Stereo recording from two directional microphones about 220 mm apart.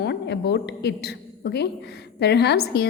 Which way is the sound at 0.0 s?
50° left (ahead or behind).